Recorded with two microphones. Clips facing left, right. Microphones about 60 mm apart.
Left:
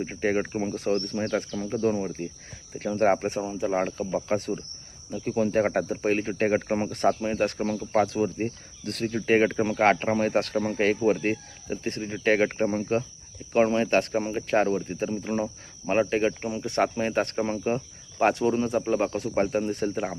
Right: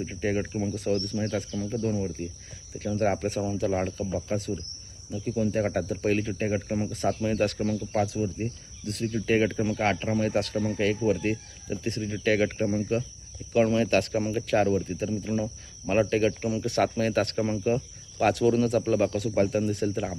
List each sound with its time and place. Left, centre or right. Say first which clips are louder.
0.0 s speech: left 3 dB; left
2.0 s speech: left 1 dB; left
4.1 s speech: left 3 dB; left
5.6 s speech: left 2 dB; left
6.3 s speech: left 4 dB; left
7.1 s speech: right 2 dB; left
9.2 s speech: left 3 dB; left
16.0 s speech: even; left